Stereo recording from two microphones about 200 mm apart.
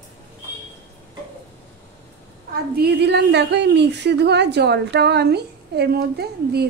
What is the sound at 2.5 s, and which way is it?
A woman's voice, 55° right (ahead or behind).